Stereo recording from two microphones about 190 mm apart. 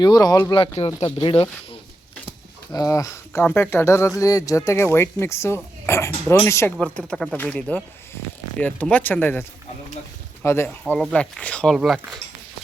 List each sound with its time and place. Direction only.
0.0 s speech: 20° left (ahead or behind)
0.8 s speech: 35° left (ahead or behind)
2.7 s speech: 15° left (ahead or behind); by 12.2 s centre (ahead or behind)